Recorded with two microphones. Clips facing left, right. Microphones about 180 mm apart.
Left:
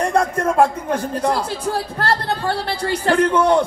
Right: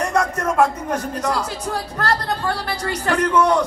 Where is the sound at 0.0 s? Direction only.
30° left (ahead or behind).